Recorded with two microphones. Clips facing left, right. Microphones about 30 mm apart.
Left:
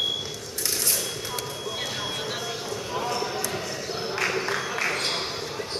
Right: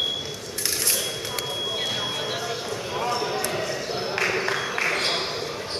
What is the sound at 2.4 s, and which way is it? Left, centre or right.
Clip-clop, centre.